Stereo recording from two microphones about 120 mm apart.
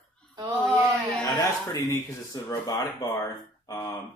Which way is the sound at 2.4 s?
30° left (ahead or behind).